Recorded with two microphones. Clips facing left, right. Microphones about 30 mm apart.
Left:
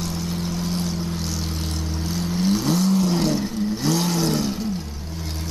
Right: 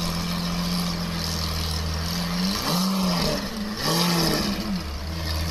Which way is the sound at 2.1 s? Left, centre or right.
Right.